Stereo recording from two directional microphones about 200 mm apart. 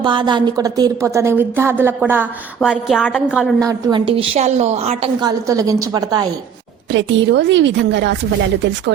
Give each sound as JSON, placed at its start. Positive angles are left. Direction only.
{"t": 0.0, "sound": "a woman's voice", "side_deg": -25}
{"t": 3.7, "sound": "a woman's voice", "side_deg": -20}
{"t": 5.5, "sound": "a woman's voice", "side_deg": -15}
{"t": 6.9, "sound": "a woman's voice", "side_deg": -65}